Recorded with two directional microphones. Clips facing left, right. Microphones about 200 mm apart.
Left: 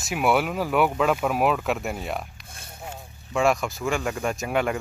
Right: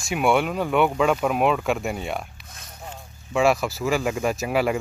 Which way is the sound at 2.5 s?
30° left (ahead or behind).